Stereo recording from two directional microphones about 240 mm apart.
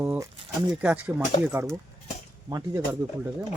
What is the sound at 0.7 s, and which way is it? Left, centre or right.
Speech, centre.